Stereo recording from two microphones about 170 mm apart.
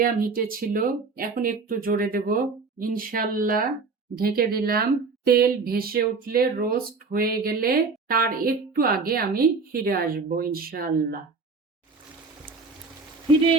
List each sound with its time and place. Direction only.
0.0 s speech: 55° right (ahead or behind)